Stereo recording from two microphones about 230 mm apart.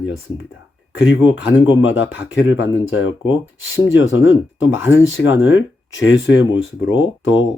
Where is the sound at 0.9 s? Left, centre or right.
Left.